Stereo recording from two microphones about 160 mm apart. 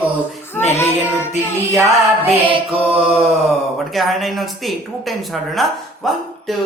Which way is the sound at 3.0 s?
Centre (ahead or behind).